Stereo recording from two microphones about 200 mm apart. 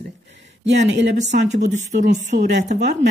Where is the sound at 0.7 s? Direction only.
60° right (ahead or behind).